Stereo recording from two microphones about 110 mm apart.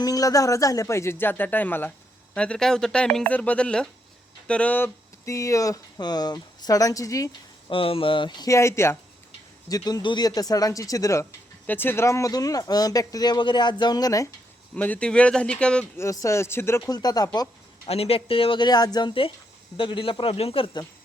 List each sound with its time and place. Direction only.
0.0 s speech: 35° left (ahead or behind); by 4.9 s 15° left (ahead or behind)
5.2 s speech: 30° left (ahead or behind)
7.7 s a man's voice: 55° left (ahead or behind)
8.4 s speech: 25° left (ahead or behind)
9.6 s speech: 35° left (ahead or behind)
14.8 s speech: 15° left (ahead or behind)
16.0 s speech: 25° left (ahead or behind)
16.9 s speech: 35° left (ahead or behind)
17.8 s a man's voice: 65° left (ahead or behind)